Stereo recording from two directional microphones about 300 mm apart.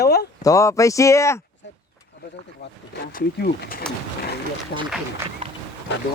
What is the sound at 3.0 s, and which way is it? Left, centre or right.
Speech, left.